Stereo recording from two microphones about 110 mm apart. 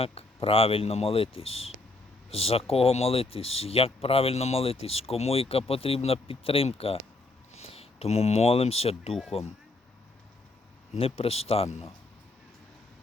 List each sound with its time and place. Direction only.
0.0 s speech: 60° left (ahead or behind)
10.9 s speech: 65° left (ahead or behind)